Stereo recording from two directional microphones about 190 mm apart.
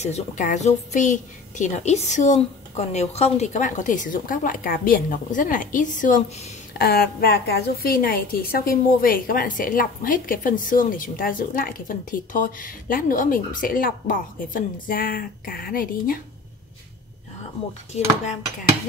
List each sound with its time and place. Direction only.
0.0 s a woman's voice: 40° left (ahead or behind)
6.8 s a woman's voice: 55° left (ahead or behind)